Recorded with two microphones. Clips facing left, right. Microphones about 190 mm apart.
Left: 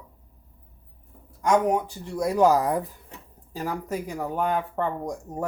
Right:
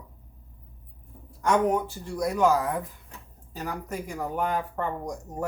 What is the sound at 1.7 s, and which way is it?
Speech, 15° left (ahead or behind).